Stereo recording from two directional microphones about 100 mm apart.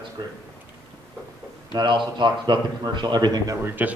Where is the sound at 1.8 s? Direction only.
50° right (ahead or behind).